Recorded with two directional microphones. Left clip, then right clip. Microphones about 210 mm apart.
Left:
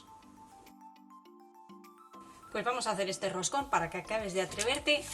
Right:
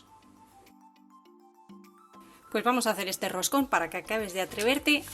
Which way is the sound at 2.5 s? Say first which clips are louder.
Right 6 dB; 55° right (ahead or behind).